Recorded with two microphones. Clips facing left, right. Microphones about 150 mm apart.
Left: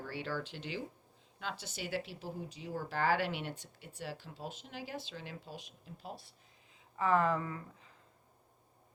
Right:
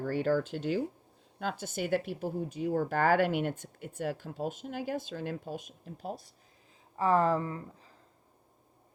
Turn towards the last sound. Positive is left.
turn(degrees=-30)  # may be behind; listen again after turning